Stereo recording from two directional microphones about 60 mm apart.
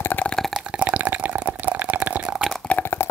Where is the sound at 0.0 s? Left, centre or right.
Left.